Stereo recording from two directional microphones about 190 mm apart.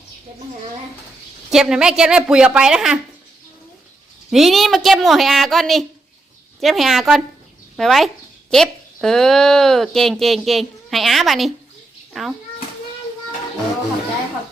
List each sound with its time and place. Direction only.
1.5 s speech: 5° right (ahead or behind)
4.3 s speech: centre (ahead or behind)